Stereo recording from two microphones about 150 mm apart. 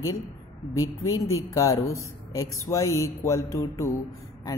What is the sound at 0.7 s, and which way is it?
A man's voice, 20° left (ahead or behind).